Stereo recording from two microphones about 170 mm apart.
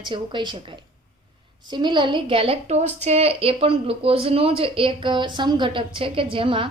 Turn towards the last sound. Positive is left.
turn(degrees=-30)  # may be behind; listen again after turning